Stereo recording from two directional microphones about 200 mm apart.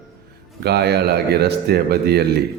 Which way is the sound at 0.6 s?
55° right (ahead or behind).